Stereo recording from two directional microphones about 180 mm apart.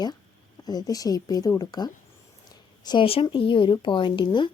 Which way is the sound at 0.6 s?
20° left (ahead or behind).